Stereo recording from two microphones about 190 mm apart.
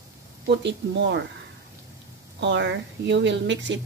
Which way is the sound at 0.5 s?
65° right (ahead or behind).